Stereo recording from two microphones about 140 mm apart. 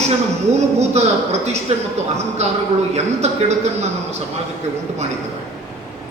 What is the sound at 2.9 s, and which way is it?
Speech, 50° right (ahead or behind).